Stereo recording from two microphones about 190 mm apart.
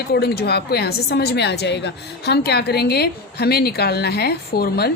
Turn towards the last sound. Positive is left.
turn(degrees=55)  # may be behind; listen again after turning